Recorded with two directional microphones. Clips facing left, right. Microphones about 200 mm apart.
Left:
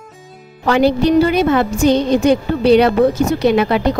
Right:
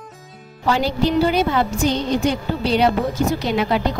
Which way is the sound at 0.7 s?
60° left (ahead or behind).